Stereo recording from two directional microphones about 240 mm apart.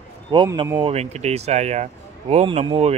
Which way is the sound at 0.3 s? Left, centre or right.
Centre.